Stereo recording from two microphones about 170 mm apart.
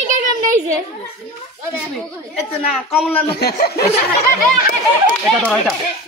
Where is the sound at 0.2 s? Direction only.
50° right (ahead or behind).